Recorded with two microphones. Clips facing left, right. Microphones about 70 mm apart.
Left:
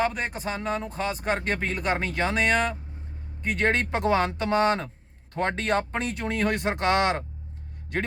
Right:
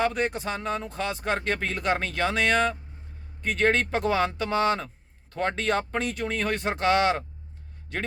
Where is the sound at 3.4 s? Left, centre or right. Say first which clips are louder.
Right 1 dB; left.